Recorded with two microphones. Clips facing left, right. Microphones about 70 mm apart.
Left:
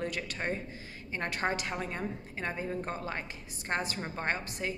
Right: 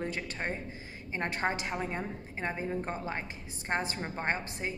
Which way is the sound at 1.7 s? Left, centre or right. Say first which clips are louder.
Right 1 dB; centre.